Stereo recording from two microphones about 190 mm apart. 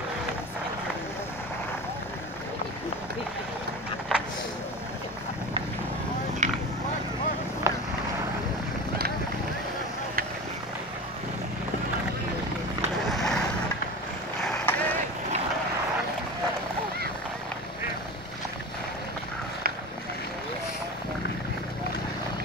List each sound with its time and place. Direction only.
4.1 s vehicle: centre (ahead or behind)
6.4 s vehicle: 40° right (ahead or behind)
7.7 s vehicle: 15° right (ahead or behind)
13.1 s vehicle: centre (ahead or behind)
14.4 s vehicle: 10° left (ahead or behind)